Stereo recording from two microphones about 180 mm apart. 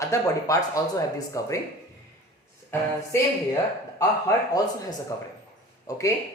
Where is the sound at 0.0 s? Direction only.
15° left (ahead or behind).